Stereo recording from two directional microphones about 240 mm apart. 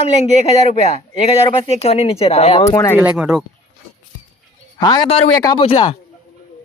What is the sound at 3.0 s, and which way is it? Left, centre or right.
Speech, centre.